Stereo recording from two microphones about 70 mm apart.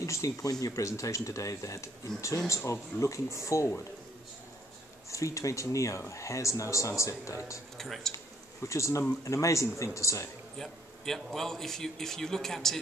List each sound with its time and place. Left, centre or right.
0.0 s speech: left
5.1 s speech: left
7.7 s speech: centre
8.6 s speech: left
10.6 s a man's voice: centre